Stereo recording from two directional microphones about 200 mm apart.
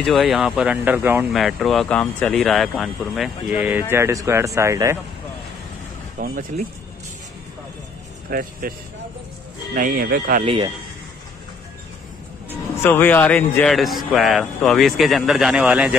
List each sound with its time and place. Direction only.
0.0 s speech: centre (ahead or behind)
6.1 s speech: 45° right (ahead or behind)
8.3 s speech: 45° right (ahead or behind)
9.8 s speech: 45° right (ahead or behind)
10.4 s speech: 25° right (ahead or behind)
12.8 s speech: 10° left (ahead or behind)